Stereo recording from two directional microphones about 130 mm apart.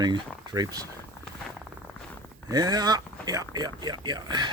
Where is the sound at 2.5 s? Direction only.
30° right (ahead or behind).